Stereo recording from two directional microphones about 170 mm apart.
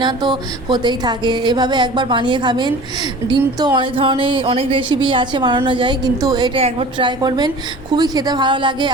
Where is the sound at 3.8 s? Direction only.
30° right (ahead or behind).